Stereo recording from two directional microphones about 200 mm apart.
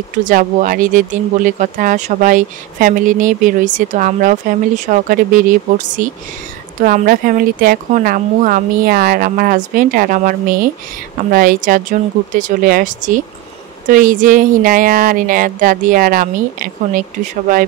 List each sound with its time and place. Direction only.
0.2 s speech: 40° right (ahead or behind)